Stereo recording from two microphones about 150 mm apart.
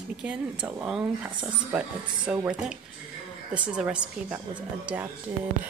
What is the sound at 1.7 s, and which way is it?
Speech, 10° right (ahead or behind).